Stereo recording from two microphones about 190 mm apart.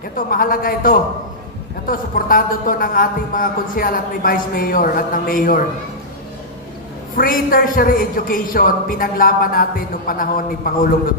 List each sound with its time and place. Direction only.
0.2 s a man's voice: 50° left (ahead or behind)
7.2 s a man's voice: 50° left (ahead or behind)